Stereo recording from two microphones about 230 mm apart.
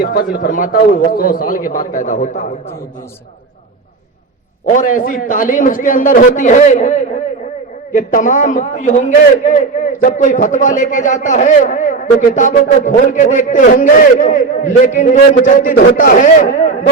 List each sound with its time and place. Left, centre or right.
0.0 s a man's voice: left
4.7 s a man's voice: left